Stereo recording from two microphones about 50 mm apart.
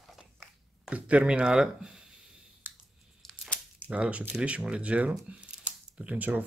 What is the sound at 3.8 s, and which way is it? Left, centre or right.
Speech, right.